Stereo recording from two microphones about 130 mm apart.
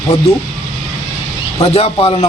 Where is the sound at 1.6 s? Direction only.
50° left (ahead or behind).